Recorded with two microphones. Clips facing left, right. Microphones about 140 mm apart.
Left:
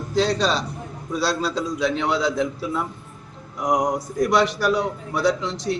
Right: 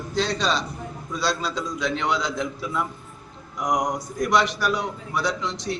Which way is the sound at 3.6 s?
30° left (ahead or behind).